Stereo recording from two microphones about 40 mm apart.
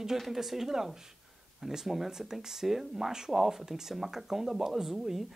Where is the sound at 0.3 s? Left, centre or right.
Centre.